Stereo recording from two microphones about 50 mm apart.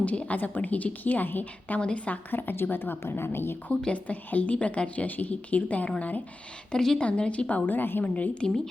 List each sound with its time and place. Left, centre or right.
0.0 s a woman's voice: left
1.8 s a woman's voice: left
2.3 s a woman's voice: left
3.9 s a woman's voice: left
6.7 s speech: centre
7.0 s a woman's voice: left
8.0 s a woman's voice: left